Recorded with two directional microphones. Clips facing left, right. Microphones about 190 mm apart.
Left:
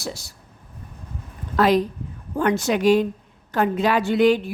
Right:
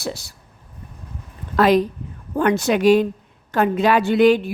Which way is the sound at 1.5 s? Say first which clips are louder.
Right 2 dB; 65° right (ahead or behind).